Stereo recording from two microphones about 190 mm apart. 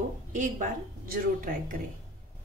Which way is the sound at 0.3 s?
40° right (ahead or behind).